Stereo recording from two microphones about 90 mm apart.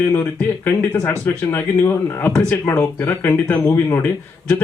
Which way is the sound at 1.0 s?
25° left (ahead or behind).